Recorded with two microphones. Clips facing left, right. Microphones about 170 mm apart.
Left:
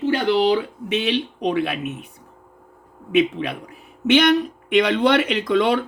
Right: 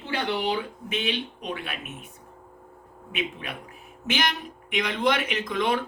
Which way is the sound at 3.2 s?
75° left (ahead or behind).